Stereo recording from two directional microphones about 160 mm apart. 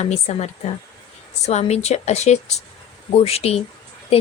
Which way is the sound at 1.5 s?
45° left (ahead or behind).